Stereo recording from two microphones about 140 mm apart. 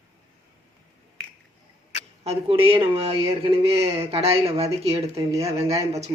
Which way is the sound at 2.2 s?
40° right (ahead or behind).